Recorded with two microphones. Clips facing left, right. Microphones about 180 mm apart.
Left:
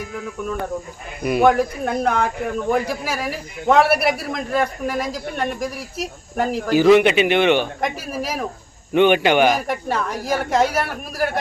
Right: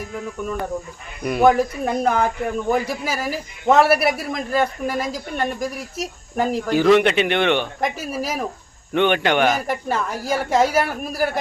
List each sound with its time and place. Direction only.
1.2 s speech: 5° left (ahead or behind)